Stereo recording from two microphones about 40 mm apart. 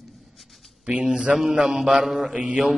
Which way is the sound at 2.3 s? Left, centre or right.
Right.